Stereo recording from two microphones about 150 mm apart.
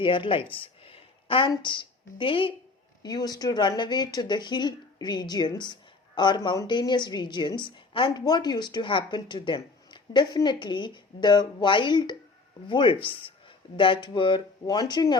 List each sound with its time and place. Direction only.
0.0 s a woman's voice: 35° left (ahead or behind)